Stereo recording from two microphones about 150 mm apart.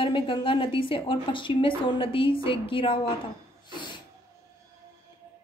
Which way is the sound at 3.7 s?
30° left (ahead or behind).